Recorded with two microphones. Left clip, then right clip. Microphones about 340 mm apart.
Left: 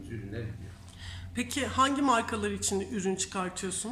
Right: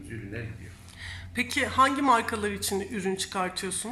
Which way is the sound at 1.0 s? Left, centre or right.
Centre.